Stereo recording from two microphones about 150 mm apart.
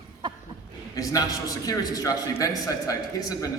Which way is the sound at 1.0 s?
25° left (ahead or behind).